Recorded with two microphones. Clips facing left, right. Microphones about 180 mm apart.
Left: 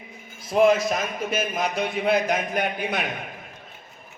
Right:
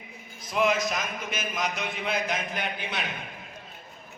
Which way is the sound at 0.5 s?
40° left (ahead or behind).